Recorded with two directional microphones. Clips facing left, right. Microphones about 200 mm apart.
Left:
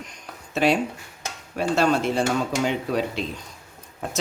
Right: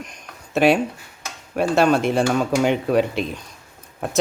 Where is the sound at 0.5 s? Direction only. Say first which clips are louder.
Right 4 dB; 60° right (ahead or behind).